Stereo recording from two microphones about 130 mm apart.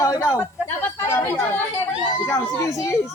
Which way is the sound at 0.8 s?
20° left (ahead or behind).